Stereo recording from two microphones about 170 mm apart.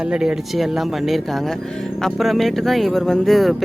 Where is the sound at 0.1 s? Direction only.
5° right (ahead or behind).